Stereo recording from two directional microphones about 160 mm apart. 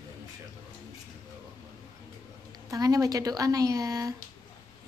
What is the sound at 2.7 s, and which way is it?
A woman's voice, 20° right (ahead or behind).